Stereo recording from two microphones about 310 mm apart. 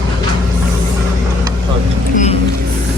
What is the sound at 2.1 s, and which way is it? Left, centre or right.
Speech, left.